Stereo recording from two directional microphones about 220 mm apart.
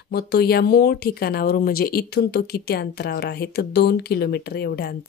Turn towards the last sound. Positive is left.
turn(degrees=45)  # may be behind; listen again after turning